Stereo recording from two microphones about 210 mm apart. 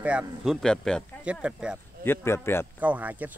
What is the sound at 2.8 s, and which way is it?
Speech, 5° right (ahead or behind).